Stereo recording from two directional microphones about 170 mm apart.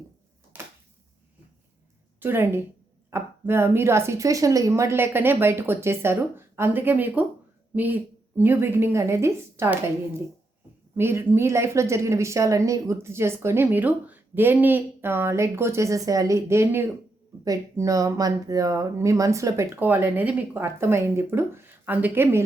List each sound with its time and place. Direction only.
0.5 s a sound: 10° right (ahead or behind)
2.2 s speech: 10° right (ahead or behind)
10.9 s speech: 15° right (ahead or behind)